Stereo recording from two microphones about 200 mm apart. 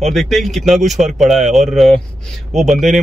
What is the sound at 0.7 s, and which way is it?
Speech, 35° right (ahead or behind).